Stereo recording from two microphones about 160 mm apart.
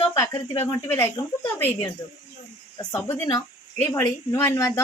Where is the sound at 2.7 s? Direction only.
20° left (ahead or behind).